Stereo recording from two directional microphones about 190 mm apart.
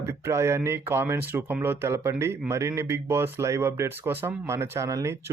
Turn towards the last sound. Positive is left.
turn(degrees=-15)  # may be behind; listen again after turning